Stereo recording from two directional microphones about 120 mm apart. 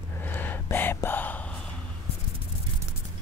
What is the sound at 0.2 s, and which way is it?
Whispering, 15° left (ahead or behind).